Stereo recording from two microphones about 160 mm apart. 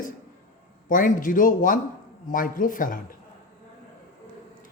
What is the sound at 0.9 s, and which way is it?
A man's voice, 55° left (ahead or behind).